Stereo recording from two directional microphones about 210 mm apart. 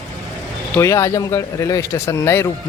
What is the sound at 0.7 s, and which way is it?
Speech, 15° left (ahead or behind).